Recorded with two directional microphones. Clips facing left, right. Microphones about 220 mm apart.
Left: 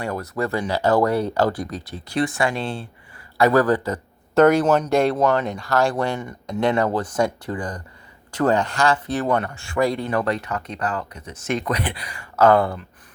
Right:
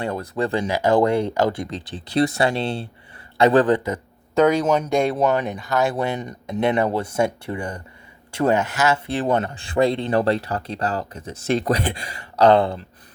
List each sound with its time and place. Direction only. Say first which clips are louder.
0.0 s speech: right 1 dB; 25° right (ahead or behind)
0.7 s speech: right 1 dB; 10° right (ahead or behind)
1.5 s speech: even; 25° right (ahead or behind)
2.1 s speech: right 3 dB; 35° right (ahead or behind)
4.4 s speech: left 2 dB; 10° left (ahead or behind)
5.1 s speech: even; 15° right (ahead or behind)
8.5 s speech: even; 5° right (ahead or behind)
9.0 s speech: right 1 dB; 25° right (ahead or behind)